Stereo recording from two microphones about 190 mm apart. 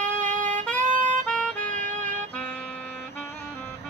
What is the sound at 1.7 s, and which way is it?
Music, 40° right (ahead or behind).